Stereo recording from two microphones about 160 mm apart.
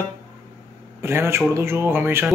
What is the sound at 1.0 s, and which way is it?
A man's voice, 15° right (ahead or behind).